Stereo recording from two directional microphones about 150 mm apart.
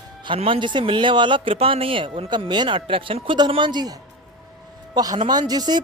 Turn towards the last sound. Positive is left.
turn(degrees=-25)  # may be behind; listen again after turning